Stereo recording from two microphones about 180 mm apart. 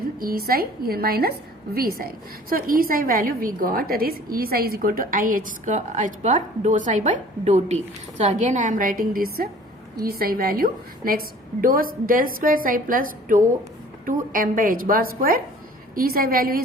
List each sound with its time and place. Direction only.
0.2 s a woman's voice: 55° right (ahead or behind)